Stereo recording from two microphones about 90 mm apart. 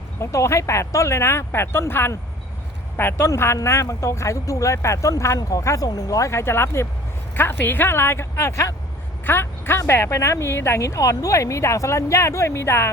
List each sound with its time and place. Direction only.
0.2 s speech: 35° left (ahead or behind)